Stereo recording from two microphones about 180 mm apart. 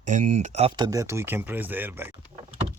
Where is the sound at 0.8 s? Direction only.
20° right (ahead or behind).